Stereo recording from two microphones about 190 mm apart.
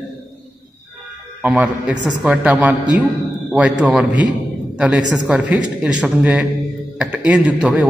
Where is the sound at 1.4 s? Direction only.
5° right (ahead or behind).